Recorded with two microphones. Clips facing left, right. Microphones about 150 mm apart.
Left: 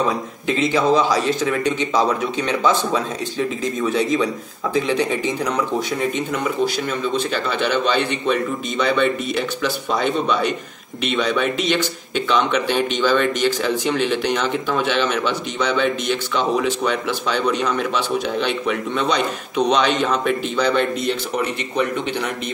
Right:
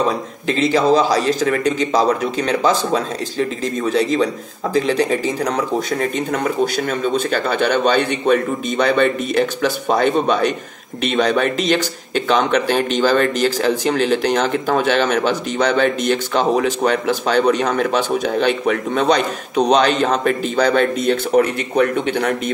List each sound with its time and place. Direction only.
0.5 s a man's voice: 35° right (ahead or behind)
6.9 s speech: 50° right (ahead or behind)